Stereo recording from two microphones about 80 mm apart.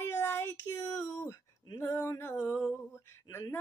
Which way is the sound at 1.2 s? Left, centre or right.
Left.